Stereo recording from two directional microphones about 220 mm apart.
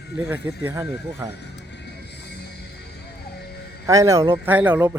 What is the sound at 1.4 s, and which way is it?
Music, 50° left (ahead or behind).